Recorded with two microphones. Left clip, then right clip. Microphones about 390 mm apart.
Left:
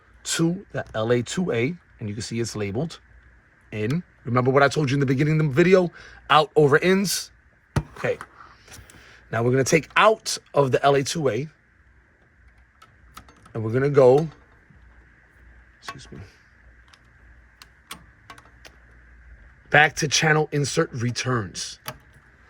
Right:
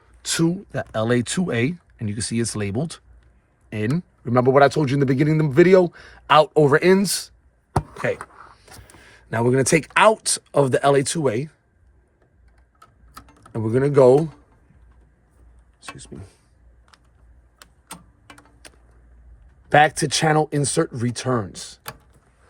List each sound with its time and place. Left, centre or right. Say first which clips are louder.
0.3 s a man's voice: right 2 dB; right
13.7 s a man's voice: right 2 dB; centre
18.6 s vehicle: right 2 dB; right
19.7 s speech: right 2 dB; centre